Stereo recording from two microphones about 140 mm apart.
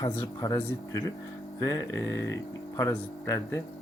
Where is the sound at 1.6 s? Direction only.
25° left (ahead or behind).